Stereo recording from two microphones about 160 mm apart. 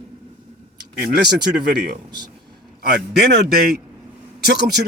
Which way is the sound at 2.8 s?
75° right (ahead or behind).